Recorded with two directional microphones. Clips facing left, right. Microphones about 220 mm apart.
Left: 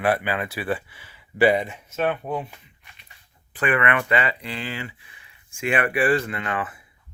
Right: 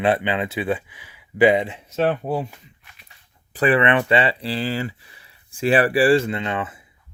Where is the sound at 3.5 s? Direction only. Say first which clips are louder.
Right 5 dB; 35° right (ahead or behind).